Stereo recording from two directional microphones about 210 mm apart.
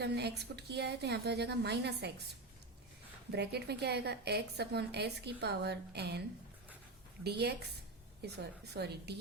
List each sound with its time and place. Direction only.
0.0 s a woman's voice: 50° right (ahead or behind)
3.3 s a woman's voice: 50° right (ahead or behind)
7.3 s a woman's voice: 50° right (ahead or behind)